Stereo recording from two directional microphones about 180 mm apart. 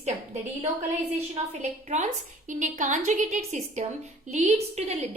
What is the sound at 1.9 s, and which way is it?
A woman's voice, 40° right (ahead or behind).